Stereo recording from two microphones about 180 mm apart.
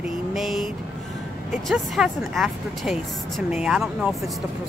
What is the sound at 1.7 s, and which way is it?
Speech, centre (ahead or behind).